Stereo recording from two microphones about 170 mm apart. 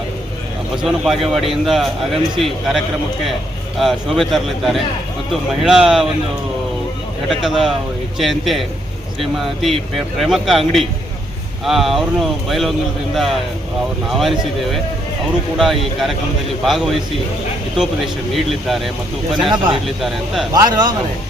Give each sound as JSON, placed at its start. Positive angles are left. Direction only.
{"t": 0.8, "sound": "a man's voice", "side_deg": -5}
{"t": 7.3, "sound": "a man's voice", "side_deg": 0}
{"t": 19.5, "sound": "a man's voice", "side_deg": -25}
{"t": 20.0, "sound": "a man's voice", "side_deg": 0}
{"t": 20.5, "sound": "a man's voice", "side_deg": -25}